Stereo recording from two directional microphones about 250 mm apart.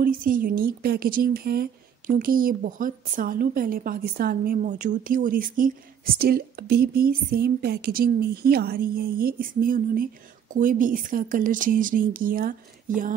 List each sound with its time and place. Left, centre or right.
0.0 s a woman's voice: right